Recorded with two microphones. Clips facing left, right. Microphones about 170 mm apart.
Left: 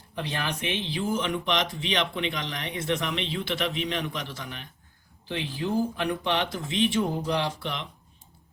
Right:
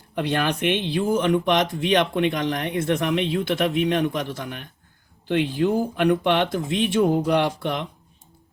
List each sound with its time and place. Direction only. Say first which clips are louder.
0.2 s speech: right 8 dB; 60° right (ahead or behind)
5.3 s speech: right 8 dB; 65° right (ahead or behind)